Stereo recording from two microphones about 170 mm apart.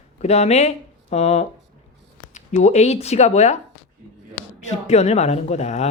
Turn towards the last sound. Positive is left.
turn(degrees=40)  # may be behind; listen again after turning